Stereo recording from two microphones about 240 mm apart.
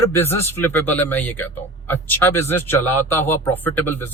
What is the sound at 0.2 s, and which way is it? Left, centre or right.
Speech, centre.